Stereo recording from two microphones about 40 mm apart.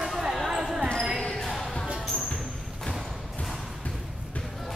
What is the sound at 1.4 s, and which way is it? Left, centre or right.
Music, centre.